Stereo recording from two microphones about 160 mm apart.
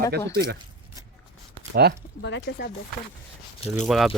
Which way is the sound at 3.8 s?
Centre (ahead or behind).